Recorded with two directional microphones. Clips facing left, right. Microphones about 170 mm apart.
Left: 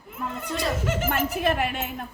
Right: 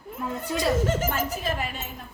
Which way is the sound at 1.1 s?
65° left (ahead or behind).